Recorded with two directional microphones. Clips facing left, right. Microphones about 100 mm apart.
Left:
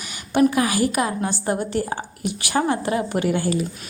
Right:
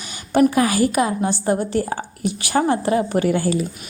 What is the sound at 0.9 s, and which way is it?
A woman's voice, 25° right (ahead or behind).